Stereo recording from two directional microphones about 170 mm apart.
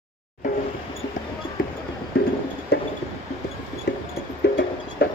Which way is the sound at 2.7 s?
75° left (ahead or behind).